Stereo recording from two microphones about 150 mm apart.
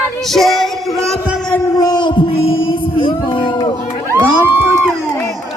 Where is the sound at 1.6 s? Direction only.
25° left (ahead or behind).